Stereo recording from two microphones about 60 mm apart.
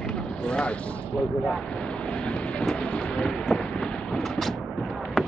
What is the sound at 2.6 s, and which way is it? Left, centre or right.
Thunder, centre.